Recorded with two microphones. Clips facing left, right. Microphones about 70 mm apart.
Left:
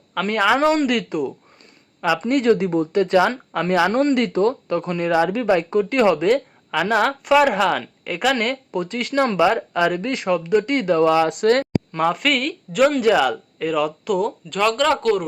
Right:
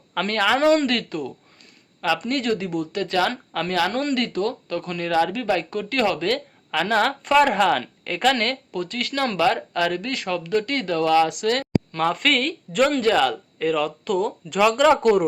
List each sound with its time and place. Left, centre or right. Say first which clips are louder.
0.3 s speech: left 1 dB; centre
11.3 s speech: left 6 dB; left
11.9 s speech: left 1 dB; centre
14.5 s speech: right 3 dB; centre